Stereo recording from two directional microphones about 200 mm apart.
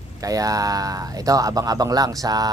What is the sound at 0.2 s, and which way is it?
Speech, 15° right (ahead or behind).